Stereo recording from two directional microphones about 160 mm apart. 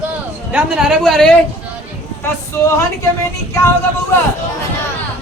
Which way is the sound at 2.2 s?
15° left (ahead or behind).